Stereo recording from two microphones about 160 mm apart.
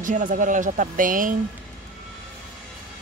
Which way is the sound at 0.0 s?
55° right (ahead or behind).